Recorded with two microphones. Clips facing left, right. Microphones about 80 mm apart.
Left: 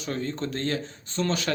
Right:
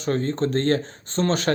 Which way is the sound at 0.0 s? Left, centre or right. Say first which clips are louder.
Right 7 dB; right.